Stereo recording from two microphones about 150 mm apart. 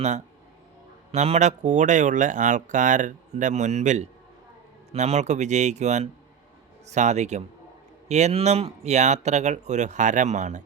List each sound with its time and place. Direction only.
1.1 s speech: 45° right (ahead or behind)